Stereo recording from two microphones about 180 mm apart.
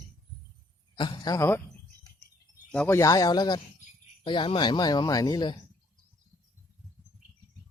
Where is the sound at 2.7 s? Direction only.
10° left (ahead or behind).